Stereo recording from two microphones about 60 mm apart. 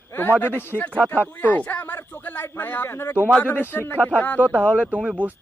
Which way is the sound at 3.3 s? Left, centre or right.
Left.